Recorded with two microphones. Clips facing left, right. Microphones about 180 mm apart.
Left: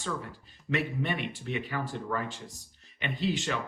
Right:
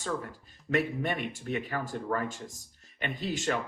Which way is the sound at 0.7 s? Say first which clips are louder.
Right 2 dB; 45° right (ahead or behind).